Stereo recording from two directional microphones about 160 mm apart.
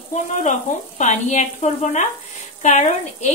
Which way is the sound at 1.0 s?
50° left (ahead or behind).